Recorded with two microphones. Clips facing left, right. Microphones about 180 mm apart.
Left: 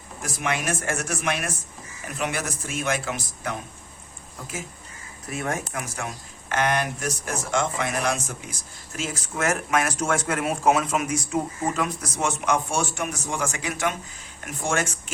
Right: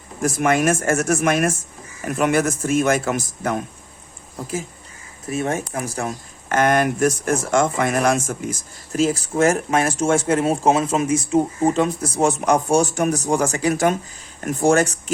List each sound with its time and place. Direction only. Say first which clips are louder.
0.2 s speech: right 10 dB; 45° right (ahead or behind)
5.3 s speech: right 6 dB; 25° right (ahead or behind)